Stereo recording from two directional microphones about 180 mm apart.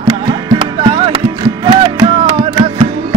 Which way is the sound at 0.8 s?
30° right (ahead or behind).